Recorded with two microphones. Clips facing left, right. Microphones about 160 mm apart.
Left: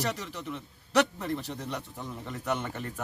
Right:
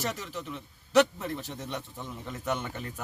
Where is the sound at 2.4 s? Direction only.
Centre (ahead or behind).